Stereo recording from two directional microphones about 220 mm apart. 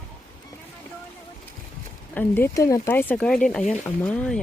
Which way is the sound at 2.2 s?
10° left (ahead or behind).